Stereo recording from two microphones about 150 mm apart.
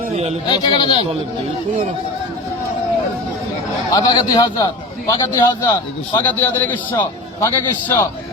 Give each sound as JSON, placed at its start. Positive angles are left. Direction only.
{"t": 0.4, "sound": "a man's voice", "side_deg": 30}
{"t": 3.9, "sound": "a man's voice", "side_deg": 25}
{"t": 6.1, "sound": "a man's voice", "side_deg": 15}